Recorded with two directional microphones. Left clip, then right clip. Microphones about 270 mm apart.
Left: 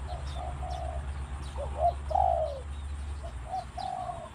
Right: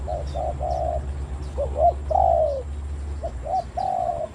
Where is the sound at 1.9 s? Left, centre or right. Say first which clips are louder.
Right 6 dB; centre.